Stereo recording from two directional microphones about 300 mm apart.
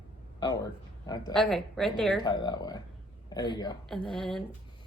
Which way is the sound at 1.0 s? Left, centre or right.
Centre.